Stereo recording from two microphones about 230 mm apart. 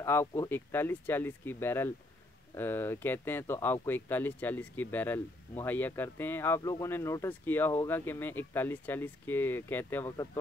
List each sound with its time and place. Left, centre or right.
0.0 s speech: centre